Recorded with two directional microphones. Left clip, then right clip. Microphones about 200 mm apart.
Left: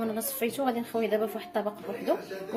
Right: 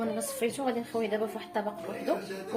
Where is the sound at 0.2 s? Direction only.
25° left (ahead or behind).